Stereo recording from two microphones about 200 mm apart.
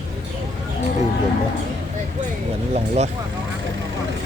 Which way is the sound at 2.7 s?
30° right (ahead or behind).